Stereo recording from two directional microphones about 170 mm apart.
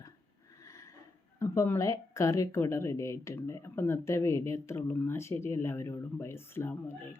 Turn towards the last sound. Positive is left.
turn(degrees=15)  # may be behind; listen again after turning